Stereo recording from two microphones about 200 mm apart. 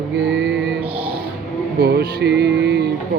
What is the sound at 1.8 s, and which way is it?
Music, 50° right (ahead or behind).